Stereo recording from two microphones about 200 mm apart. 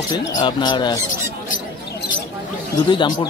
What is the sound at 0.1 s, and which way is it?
Speech, 20° left (ahead or behind).